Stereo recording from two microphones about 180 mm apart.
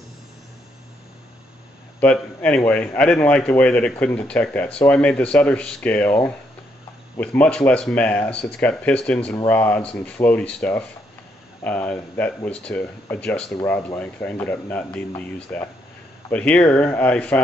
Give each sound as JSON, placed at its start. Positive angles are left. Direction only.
{"t": 2.0, "sound": "a man's voice", "side_deg": 5}